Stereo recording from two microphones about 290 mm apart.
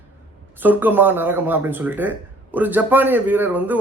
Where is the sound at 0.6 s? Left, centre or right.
Centre.